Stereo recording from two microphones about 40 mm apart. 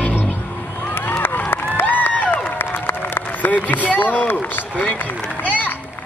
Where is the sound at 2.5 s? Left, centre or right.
Left.